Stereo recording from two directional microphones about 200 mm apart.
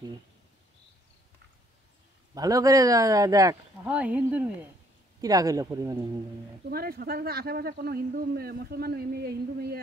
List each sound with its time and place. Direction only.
2.3 s speech: 20° right (ahead or behind)
6.7 s speech: 50° right (ahead or behind)